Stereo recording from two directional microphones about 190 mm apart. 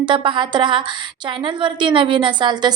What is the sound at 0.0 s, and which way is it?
A woman's voice, 25° right (ahead or behind).